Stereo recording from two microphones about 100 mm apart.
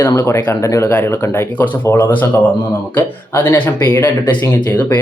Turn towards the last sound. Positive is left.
turn(degrees=20)  # may be behind; listen again after turning